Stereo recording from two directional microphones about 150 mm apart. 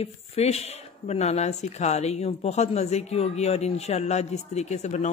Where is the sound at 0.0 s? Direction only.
45° left (ahead or behind).